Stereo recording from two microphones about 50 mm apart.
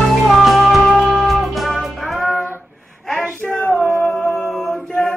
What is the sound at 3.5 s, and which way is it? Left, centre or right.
Female singing, left.